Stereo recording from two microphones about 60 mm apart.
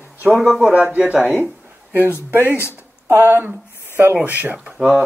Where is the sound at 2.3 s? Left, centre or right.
Right.